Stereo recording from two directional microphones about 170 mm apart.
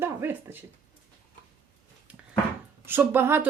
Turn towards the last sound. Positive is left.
turn(degrees=-10)  # may be behind; listen again after turning